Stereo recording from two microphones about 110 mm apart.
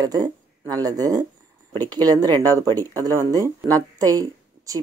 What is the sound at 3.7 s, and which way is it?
Speech, 35° right (ahead or behind).